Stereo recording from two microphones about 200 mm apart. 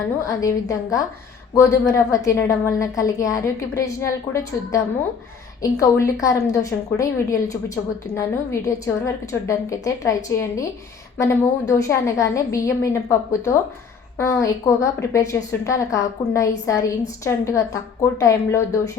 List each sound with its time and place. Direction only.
0.3 s a woman's voice: 15° left (ahead or behind)
14.2 s a woman's voice: 15° left (ahead or behind)